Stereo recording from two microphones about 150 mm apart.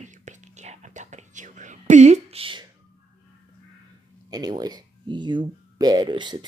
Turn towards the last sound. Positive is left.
turn(degrees=-30)  # may be behind; listen again after turning